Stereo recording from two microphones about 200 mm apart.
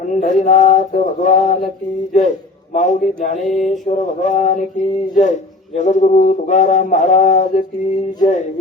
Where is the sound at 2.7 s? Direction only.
35° left (ahead or behind).